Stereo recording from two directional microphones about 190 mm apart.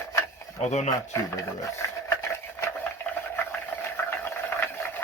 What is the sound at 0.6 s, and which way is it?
Speech, 35° left (ahead or behind).